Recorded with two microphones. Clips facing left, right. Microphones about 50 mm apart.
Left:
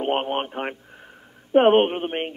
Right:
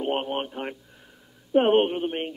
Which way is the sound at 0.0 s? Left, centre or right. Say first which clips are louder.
Left 3 dB; left.